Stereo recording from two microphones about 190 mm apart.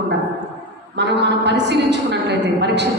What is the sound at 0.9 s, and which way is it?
A woman's voice, 65° right (ahead or behind).